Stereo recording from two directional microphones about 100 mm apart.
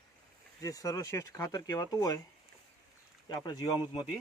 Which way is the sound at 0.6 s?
35° left (ahead or behind).